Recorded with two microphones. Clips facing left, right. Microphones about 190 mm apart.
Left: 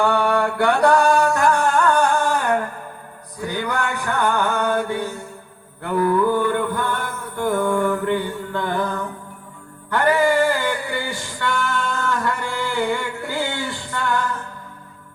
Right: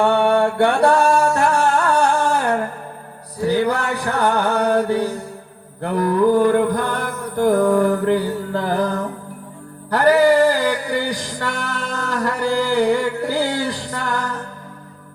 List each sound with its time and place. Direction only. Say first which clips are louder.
0.0 s music: right 3 dB; 25° right (ahead or behind)